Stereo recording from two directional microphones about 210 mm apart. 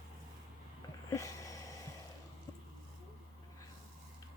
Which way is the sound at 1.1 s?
15° left (ahead or behind).